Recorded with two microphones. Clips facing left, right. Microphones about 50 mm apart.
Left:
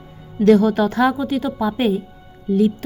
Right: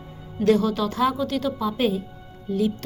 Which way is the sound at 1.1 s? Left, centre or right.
Centre.